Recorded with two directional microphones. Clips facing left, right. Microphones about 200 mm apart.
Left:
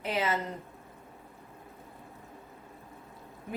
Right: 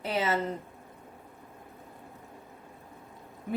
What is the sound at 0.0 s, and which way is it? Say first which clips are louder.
Speech: right 1 dB; 30° right (ahead or behind).